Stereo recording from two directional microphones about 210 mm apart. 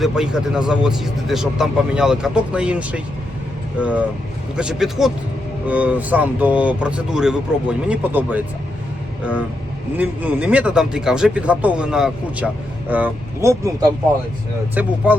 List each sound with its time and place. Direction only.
0.0 s speech: centre (ahead or behind)
4.5 s speech: 5° right (ahead or behind)
10.0 s speech: 5° right (ahead or behind)